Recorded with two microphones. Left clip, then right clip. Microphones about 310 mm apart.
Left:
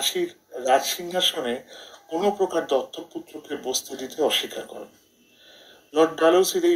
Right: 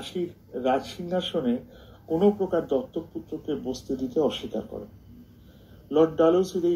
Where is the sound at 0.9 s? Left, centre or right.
Left.